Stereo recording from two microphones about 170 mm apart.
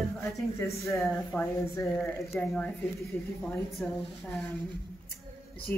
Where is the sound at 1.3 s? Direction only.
10° left (ahead or behind).